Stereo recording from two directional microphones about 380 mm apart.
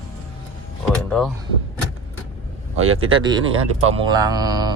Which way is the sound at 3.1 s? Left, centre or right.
Centre.